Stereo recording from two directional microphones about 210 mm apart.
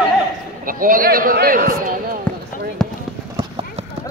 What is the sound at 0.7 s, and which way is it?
A man's voice, 40° right (ahead or behind).